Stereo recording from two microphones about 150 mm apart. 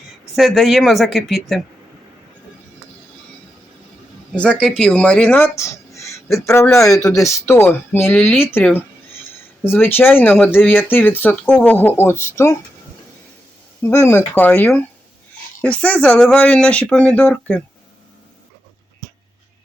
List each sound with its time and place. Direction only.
0.3 s speech: centre (ahead or behind)
4.4 s speech: 5° left (ahead or behind)
13.8 s speech: 15° left (ahead or behind)